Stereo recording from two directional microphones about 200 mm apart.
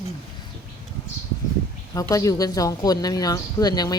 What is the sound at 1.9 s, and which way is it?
Speech, 15° left (ahead or behind).